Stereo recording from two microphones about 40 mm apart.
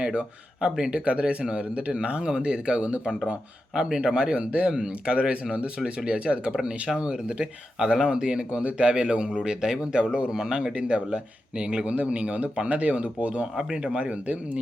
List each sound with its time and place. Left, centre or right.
0.0 s speech: right
3.8 s speech: centre
4.4 s a man's voice: right
13.6 s speech: centre
14.0 s a man's voice: right